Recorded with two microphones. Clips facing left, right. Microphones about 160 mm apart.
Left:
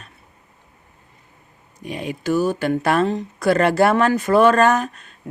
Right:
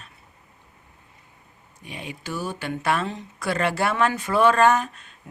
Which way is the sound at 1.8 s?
45° left (ahead or behind).